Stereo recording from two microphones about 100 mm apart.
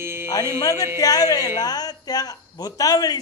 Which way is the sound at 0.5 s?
35° left (ahead or behind).